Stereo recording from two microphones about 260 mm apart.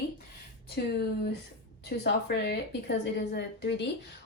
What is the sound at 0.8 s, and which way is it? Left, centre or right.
A woman's voice, left.